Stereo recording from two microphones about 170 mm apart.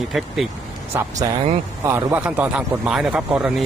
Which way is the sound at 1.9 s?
15° right (ahead or behind).